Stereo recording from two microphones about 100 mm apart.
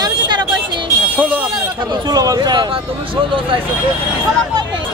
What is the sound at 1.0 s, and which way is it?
Vehicle, 15° right (ahead or behind).